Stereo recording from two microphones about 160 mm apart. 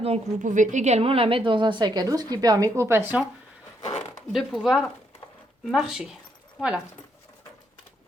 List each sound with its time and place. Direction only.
0.0 s a woman's voice: 45° right (ahead or behind); by 3.2 s 10° right (ahead or behind)
4.3 s speech: centre (ahead or behind)